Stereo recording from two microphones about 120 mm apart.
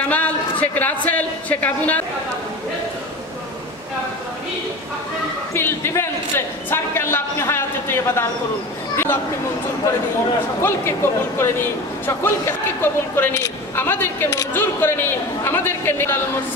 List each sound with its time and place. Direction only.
0.1 s speech: 15° left (ahead or behind)
5.5 s a man's voice: 20° left (ahead or behind)
8.9 s chatter: 20° left (ahead or behind)
10.6 s a man's voice: 20° left (ahead or behind)